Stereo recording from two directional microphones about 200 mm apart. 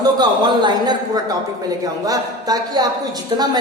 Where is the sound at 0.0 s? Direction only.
20° right (ahead or behind).